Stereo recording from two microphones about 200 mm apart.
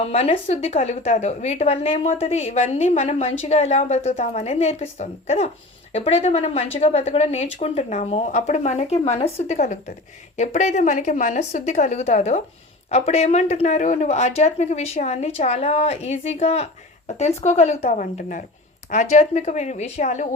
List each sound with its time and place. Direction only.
0.0 s a woman's voice: 30° left (ahead or behind)